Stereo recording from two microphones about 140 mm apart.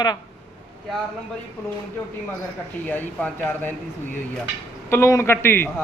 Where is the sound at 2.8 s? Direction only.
10° left (ahead or behind).